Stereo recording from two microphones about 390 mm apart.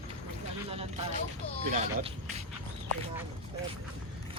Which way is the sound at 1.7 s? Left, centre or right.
Centre.